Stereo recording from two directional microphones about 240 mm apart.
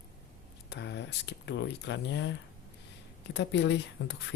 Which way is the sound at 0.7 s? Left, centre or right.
Left.